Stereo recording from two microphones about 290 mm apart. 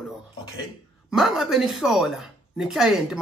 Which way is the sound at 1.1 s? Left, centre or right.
Centre.